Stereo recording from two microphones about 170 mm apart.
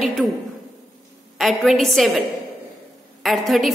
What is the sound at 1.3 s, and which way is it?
Speech, centre (ahead or behind).